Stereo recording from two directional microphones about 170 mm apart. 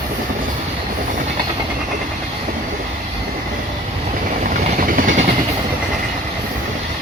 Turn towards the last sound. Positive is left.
turn(degrees=-50)  # may be behind; listen again after turning